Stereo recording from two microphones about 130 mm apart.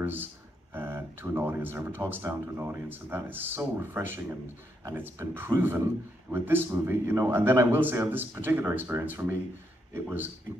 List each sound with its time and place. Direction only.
0.0 s speech: 15° right (ahead or behind)